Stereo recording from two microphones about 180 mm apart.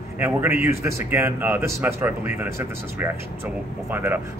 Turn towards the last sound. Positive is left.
turn(degrees=-10)  # may be behind; listen again after turning